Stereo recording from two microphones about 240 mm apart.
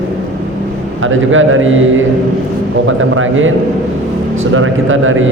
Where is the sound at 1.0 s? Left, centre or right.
Right.